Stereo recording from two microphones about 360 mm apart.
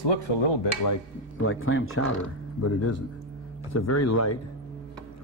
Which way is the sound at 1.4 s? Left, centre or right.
Left.